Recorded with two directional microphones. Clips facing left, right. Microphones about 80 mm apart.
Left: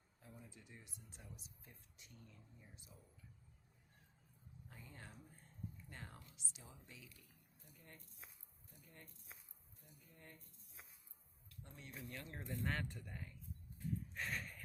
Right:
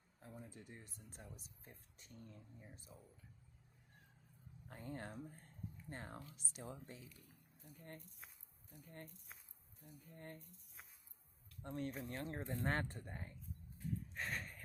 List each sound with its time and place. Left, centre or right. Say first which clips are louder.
0.2 s speech: right 5 dB; right
2.9 s speech: right 4 dB; right
4.7 s speech: right 10 dB; right
5.9 s speech: right 6 dB; right
11.6 s speech: right 14 dB; right
11.9 s speech: right 6 dB; right
14.1 s a sound: right 1 dB; right